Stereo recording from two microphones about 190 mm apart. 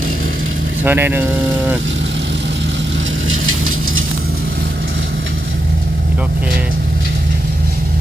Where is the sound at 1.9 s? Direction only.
75° right (ahead or behind); by 4.0 s 90° right.